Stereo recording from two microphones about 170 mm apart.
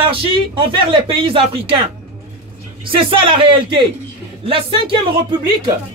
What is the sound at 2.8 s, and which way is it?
Speech, 30° right (ahead or behind).